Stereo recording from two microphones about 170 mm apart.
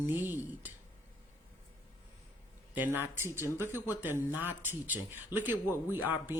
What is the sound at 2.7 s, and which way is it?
Speech, 10° right (ahead or behind).